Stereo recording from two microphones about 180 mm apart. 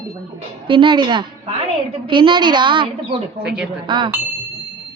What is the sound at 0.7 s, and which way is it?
Speech, 25° right (ahead or behind).